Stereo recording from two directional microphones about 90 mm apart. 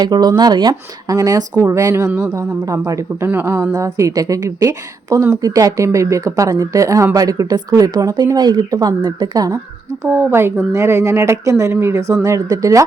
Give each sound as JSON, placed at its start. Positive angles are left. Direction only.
{"t": 0.0, "sound": "a woman's voice", "side_deg": -45}
{"t": 9.0, "sound": "speech", "side_deg": -65}
{"t": 9.2, "sound": "speech", "side_deg": -45}
{"t": 10.0, "sound": "a woman's voice", "side_deg": -25}